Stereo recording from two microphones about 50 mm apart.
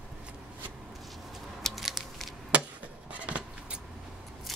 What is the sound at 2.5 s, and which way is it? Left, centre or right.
Chop, right.